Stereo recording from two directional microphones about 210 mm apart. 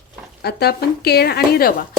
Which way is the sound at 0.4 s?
50° left (ahead or behind).